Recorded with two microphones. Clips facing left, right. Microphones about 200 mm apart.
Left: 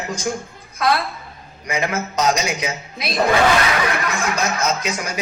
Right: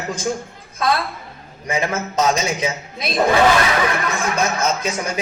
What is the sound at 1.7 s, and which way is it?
A woman's voice, 25° right (ahead or behind).